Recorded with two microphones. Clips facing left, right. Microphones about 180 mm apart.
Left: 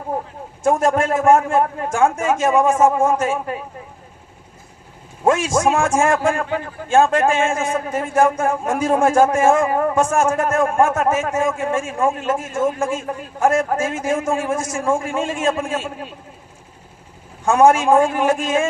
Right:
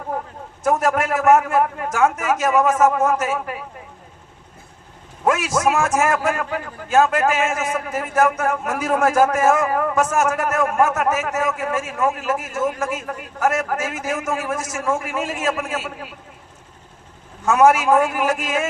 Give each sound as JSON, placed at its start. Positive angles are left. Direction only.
{"t": 0.6, "sound": "a man's voice", "side_deg": 25}
{"t": 5.2, "sound": "a man's voice", "side_deg": 30}
{"t": 17.4, "sound": "a man's voice", "side_deg": 30}